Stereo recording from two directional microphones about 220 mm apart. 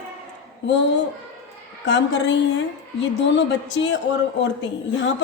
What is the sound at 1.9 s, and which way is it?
A woman's voice, 55° left (ahead or behind).